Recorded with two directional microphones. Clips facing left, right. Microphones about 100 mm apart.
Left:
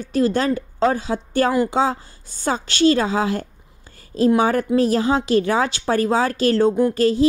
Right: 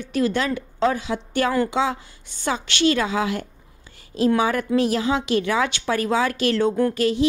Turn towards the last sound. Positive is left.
turn(degrees=35)  # may be behind; listen again after turning